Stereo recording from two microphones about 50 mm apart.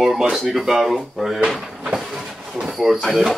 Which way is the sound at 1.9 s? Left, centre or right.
Centre.